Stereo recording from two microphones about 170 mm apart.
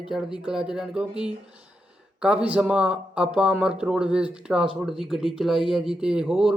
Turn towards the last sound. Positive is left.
turn(degrees=-5)  # may be behind; listen again after turning